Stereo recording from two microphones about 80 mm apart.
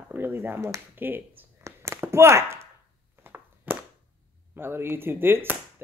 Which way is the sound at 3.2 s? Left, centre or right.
Right.